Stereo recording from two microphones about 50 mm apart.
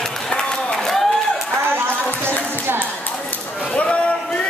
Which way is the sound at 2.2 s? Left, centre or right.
Right.